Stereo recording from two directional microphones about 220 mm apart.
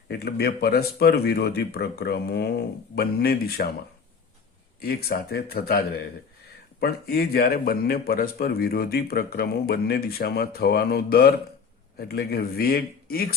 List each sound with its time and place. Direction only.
0.1 s a man's voice: 45° left (ahead or behind)
4.8 s a man's voice: 45° left (ahead or behind)